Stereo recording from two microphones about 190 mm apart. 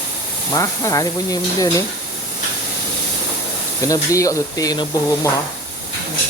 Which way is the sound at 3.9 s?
15° left (ahead or behind).